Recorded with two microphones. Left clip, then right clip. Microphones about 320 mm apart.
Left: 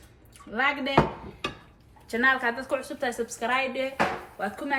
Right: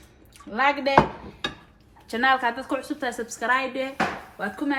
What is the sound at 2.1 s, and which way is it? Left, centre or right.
Speech, right.